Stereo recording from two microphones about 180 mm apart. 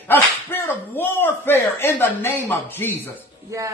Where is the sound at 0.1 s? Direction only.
10° left (ahead or behind).